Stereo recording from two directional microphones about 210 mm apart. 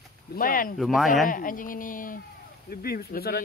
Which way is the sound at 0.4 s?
40° left (ahead or behind).